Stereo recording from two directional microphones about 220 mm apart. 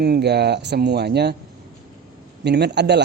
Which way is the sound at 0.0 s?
50° right (ahead or behind).